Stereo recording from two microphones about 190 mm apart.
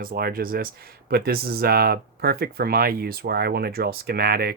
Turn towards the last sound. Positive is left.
turn(degrees=-55)  # may be behind; listen again after turning